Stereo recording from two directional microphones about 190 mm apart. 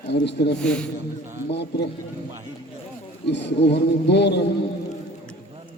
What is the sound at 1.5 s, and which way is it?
Speech, 65° left (ahead or behind).